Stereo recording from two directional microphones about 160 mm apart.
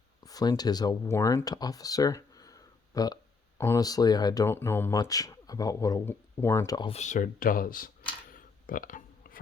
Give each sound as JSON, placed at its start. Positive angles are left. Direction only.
{"t": 0.3, "sound": "speech", "side_deg": 25}
{"t": 6.7, "sound": "speech", "side_deg": 30}
{"t": 7.0, "sound": "speech", "side_deg": 55}
{"t": 8.3, "sound": "a sound", "side_deg": 60}